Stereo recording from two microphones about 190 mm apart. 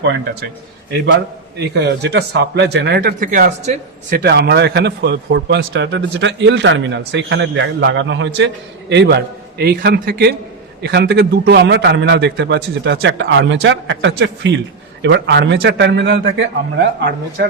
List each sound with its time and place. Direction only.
1.5 s a man's voice: 60° right (ahead or behind); by 4.3 s 45° right (ahead or behind)
4.3 s a man's voice: 60° right (ahead or behind)